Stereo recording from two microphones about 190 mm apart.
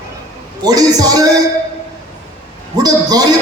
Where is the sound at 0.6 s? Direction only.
20° right (ahead or behind).